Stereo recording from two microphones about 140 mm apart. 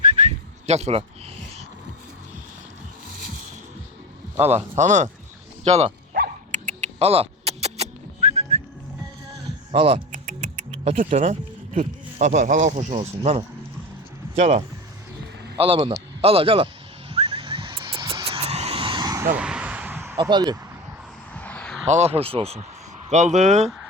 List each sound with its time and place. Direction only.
0.3 s a sound: 50° right (ahead or behind)
4.4 s speech: 50° right (ahead or behind)
6.1 s dog: 60° right (ahead or behind)
9.7 s speech: 45° right (ahead or behind)
10.1 s music: 60° right (ahead or behind)
11.2 s speech: 65° right (ahead or behind)
13.0 s speech: 45° right (ahead or behind)
17.1 s a sound: 40° right (ahead or behind)
18.3 s vehicle: 45° right (ahead or behind); by 19.2 s 30° right (ahead or behind)
19.3 s a sound: 5° right (ahead or behind)
20.1 s speech: 30° right (ahead or behind)
21.3 s a sound: 10° left (ahead or behind)
21.8 s speech: 50° right (ahead or behind)
23.0 s speech: 60° right (ahead or behind)